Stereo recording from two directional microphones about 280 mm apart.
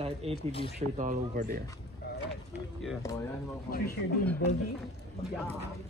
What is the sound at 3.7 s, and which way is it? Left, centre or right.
Speech, left.